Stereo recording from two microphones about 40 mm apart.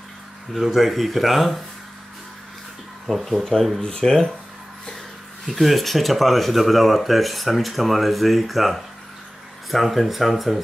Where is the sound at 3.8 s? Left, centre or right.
Centre.